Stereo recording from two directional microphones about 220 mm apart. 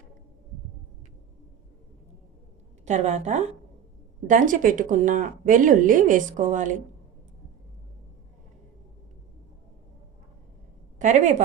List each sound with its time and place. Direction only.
2.8 s speech: 30° right (ahead or behind)
11.0 s speech: 35° right (ahead or behind)